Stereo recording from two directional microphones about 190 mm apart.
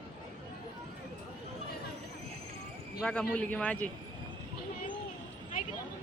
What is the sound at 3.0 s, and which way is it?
Speech, 5° left (ahead or behind).